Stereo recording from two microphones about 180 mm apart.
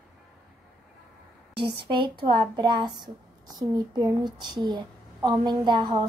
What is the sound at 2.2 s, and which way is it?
A child's voice, 25° right (ahead or behind).